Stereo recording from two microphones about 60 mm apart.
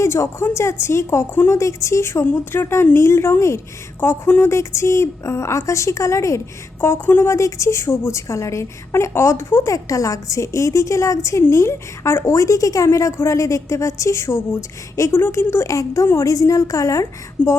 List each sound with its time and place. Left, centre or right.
0.0 s a woman's voice: left
6.8 s speech: left
7.3 s a woman's voice: left
15.3 s speech: left
15.7 s a woman's voice: left